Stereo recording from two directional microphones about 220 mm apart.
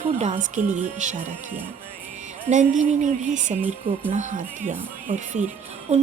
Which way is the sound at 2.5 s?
35° right (ahead or behind).